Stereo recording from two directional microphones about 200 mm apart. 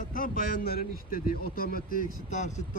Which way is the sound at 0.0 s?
45° left (ahead or behind).